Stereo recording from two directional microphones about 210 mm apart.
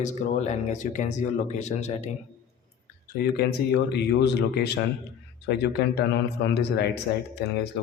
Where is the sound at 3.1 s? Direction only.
45° left (ahead or behind).